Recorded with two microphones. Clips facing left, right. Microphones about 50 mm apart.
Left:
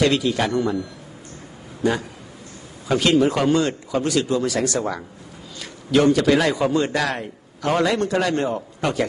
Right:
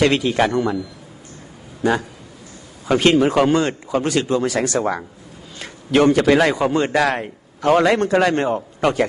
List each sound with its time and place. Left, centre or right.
0.0 s a man's voice: right
2.8 s a man's voice: right